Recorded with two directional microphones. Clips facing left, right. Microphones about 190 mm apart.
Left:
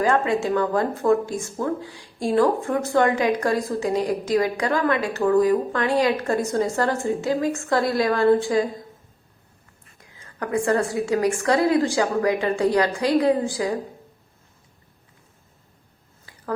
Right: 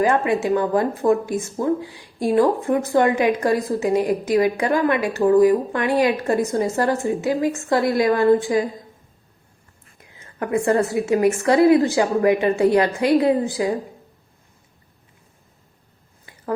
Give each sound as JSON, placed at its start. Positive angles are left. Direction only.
{"t": 0.0, "sound": "speech", "side_deg": -20}
{"t": 10.1, "sound": "speech", "side_deg": -20}